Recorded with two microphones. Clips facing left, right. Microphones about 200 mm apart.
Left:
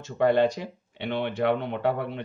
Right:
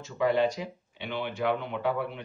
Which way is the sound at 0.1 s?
60° left (ahead or behind).